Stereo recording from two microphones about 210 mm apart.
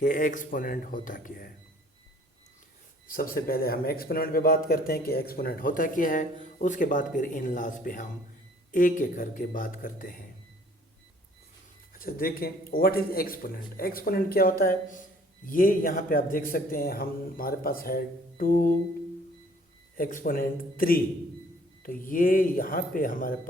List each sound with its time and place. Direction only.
0.0 s a man's voice: 40° left (ahead or behind)
3.1 s a man's voice: 45° left (ahead or behind)
11.9 s a man's voice: 45° left (ahead or behind)
20.0 s a man's voice: 40° left (ahead or behind)